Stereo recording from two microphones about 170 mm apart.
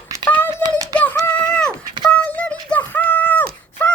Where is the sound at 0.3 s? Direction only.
10° left (ahead or behind).